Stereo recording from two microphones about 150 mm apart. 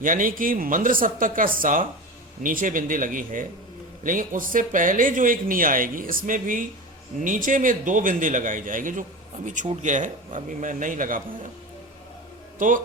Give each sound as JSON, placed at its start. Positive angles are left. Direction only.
{"t": 0.0, "sound": "a man's voice", "side_deg": -65}
{"t": 12.5, "sound": "speech", "side_deg": -60}